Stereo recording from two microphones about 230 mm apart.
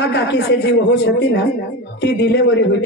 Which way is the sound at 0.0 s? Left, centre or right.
Left.